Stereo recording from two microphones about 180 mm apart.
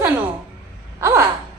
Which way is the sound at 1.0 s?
15° right (ahead or behind).